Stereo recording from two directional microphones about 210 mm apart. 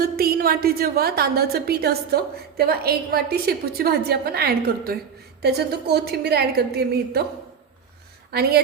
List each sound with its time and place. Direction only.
0.0 s a woman's voice: 45° right (ahead or behind)
8.3 s a woman's voice: 50° right (ahead or behind)